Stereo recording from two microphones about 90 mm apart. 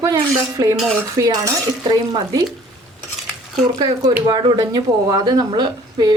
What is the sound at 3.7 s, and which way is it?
A woman's voice, 45° right (ahead or behind).